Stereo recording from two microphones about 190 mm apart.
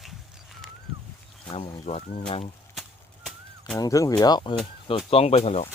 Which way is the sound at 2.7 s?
Centre (ahead or behind).